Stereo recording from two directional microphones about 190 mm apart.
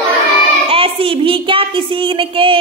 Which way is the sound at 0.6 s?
30° right (ahead or behind).